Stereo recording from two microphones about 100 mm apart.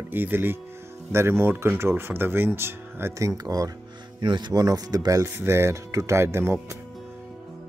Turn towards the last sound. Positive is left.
turn(degrees=-25)  # may be behind; listen again after turning